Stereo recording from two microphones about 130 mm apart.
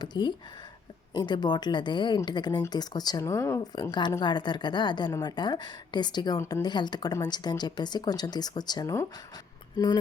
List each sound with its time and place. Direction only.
0.0 s a woman's voice: 35° left (ahead or behind)